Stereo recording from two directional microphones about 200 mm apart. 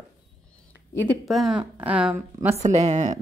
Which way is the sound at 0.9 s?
10° left (ahead or behind).